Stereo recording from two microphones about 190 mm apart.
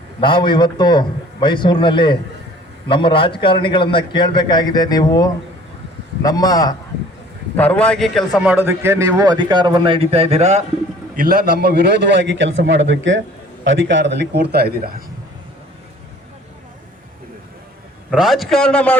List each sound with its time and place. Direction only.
0.2 s a man's voice: 25° left (ahead or behind)
7.5 s a man's voice: 10° left (ahead or behind)
8.4 s speech: 10° right (ahead or behind); by 10.6 s 35° right (ahead or behind)
11.2 s a man's voice: 55° right (ahead or behind)
18.1 s a man's voice: centre (ahead or behind)